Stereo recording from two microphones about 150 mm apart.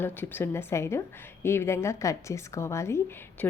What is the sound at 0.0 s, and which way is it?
A woman's voice, 15° left (ahead or behind).